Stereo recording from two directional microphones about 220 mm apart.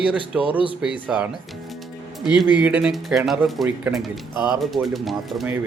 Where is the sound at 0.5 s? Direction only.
25° left (ahead or behind).